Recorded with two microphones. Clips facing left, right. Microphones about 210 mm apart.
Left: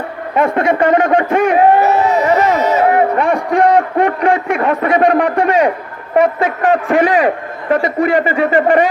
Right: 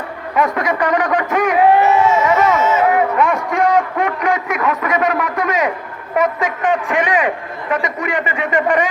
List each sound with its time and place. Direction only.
0.3 s speech: 30° left (ahead or behind)